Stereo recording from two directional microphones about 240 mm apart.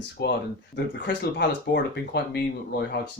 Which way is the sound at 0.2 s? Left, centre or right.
Left.